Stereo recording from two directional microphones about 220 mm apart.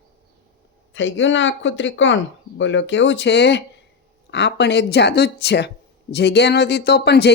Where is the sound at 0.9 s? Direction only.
55° left (ahead or behind).